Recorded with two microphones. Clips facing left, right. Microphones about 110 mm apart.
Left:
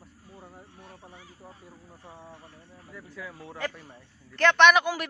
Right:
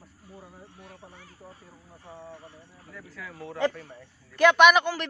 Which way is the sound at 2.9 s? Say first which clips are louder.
Left 1 dB; 15° left (ahead or behind).